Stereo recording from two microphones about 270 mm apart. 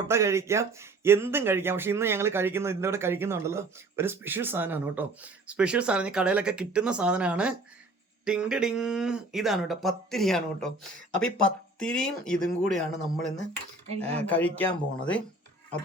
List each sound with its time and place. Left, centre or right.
0.1 s speech: centre